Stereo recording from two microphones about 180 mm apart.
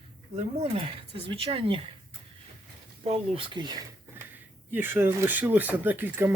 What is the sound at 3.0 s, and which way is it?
Speech, 30° right (ahead or behind).